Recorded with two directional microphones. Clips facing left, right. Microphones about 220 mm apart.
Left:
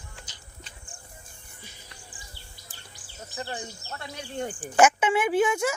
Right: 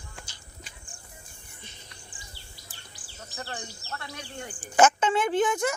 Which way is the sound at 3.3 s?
20° left (ahead or behind).